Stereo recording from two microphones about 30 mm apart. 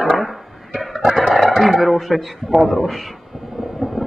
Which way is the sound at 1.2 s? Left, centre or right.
Centre.